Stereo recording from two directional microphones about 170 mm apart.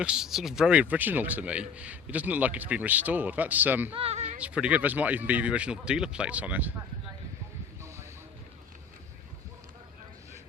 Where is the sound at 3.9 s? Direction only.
40° right (ahead or behind).